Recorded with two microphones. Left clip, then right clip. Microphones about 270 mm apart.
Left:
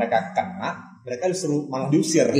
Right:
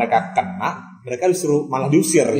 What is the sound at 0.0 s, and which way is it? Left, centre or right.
Speech, right.